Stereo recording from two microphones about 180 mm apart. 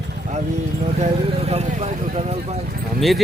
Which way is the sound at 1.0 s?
35° right (ahead or behind).